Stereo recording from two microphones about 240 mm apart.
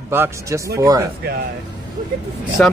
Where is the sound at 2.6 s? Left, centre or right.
Centre.